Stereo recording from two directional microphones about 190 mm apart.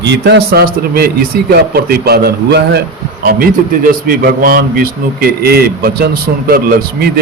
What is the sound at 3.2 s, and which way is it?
A man's voice, 50° right (ahead or behind).